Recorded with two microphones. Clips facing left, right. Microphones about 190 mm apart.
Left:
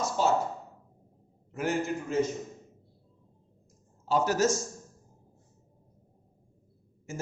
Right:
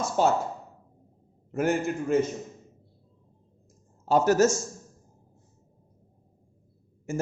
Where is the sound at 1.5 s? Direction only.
50° right (ahead or behind).